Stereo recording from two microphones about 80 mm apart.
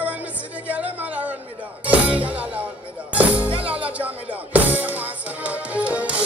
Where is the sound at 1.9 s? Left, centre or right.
Centre.